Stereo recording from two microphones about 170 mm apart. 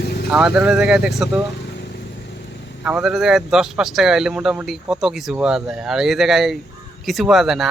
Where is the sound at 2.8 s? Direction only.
5° right (ahead or behind).